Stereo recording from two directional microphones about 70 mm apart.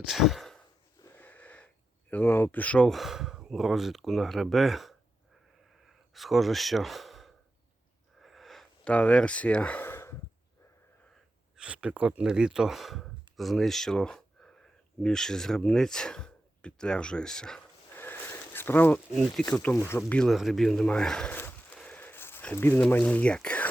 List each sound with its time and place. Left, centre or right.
0.0 s sigh: centre
1.1 s a sound: left
2.9 s speech: centre
6.1 s speech: centre
8.2 s sniff: centre
8.8 s speech: centre
9.8 s sigh: left
11.5 s speech: centre
17.9 s a sound: left
19.1 s speech: centre
19.7 s speech: left
20.3 s speech: centre
21.2 s a sound: left
22.9 s speech: left